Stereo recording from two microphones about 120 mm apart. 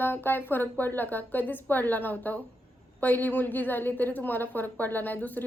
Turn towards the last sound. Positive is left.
turn(degrees=15)  # may be behind; listen again after turning